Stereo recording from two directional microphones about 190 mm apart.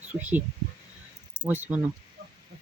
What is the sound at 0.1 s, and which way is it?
Speech, 10° right (ahead or behind).